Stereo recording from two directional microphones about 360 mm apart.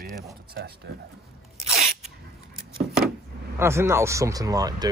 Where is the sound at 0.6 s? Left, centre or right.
Right.